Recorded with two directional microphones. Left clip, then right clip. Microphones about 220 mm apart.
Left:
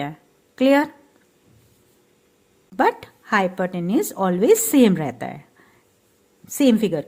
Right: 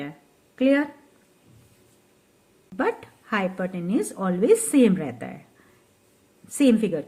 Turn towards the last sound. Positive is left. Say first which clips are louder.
# left 2 dB
turn(degrees=35)  # may be behind; listen again after turning